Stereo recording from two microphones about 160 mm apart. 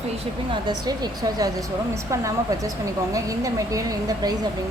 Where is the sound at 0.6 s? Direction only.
25° right (ahead or behind).